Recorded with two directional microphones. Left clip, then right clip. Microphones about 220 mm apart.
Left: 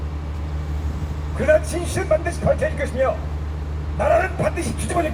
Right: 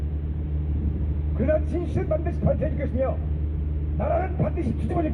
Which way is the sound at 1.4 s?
55° left (ahead or behind).